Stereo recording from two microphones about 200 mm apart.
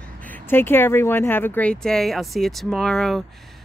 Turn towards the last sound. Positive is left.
turn(degrees=0)  # may be behind; listen again after turning